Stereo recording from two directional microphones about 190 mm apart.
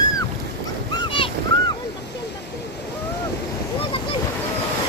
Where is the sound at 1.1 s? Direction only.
25° left (ahead or behind).